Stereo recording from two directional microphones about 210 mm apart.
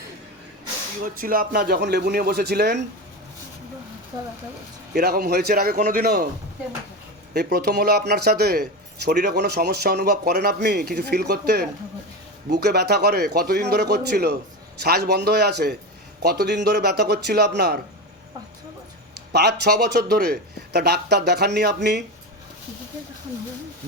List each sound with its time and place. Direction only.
1.0 s speech: 40° right (ahead or behind)
4.9 s speech: 50° right (ahead or behind)
7.3 s speech: 50° right (ahead or behind)
19.3 s speech: 50° right (ahead or behind)